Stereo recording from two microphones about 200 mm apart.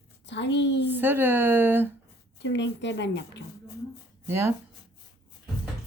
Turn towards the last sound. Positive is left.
turn(degrees=-15)  # may be behind; listen again after turning